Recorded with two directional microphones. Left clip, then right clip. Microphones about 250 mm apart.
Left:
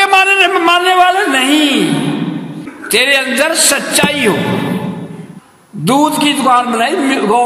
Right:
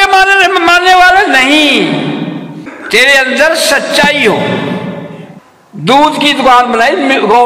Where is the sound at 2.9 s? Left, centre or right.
Left.